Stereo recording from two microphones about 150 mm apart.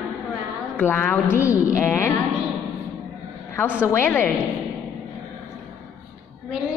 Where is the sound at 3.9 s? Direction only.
15° left (ahead or behind).